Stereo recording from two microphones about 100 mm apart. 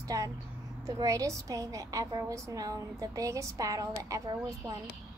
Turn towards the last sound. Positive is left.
turn(degrees=-35)  # may be behind; listen again after turning